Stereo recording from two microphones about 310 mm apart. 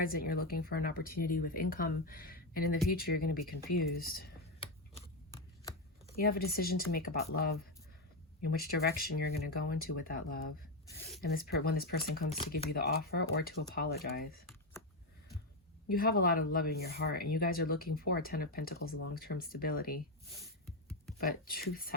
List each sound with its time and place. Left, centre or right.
0.0 s speech: left
6.1 s speech: left
15.9 s speech: left
18.8 s speech: left
19.1 s speech: left
21.2 s speech: left